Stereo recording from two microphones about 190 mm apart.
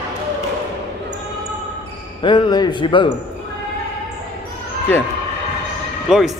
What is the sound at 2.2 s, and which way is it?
Speech, 25° left (ahead or behind).